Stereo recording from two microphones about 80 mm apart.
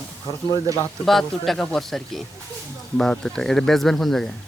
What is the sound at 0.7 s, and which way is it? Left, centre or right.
Speech, right.